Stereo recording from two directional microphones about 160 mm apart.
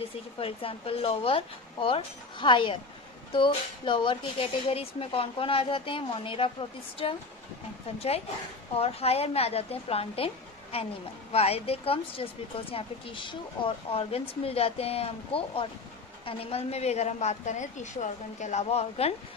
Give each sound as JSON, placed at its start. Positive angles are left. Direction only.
{"t": 0.4, "sound": "speech", "side_deg": 35}
{"t": 8.7, "sound": "speech", "side_deg": 40}